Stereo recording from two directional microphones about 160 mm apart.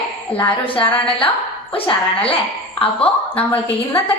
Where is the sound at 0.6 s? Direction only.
35° left (ahead or behind).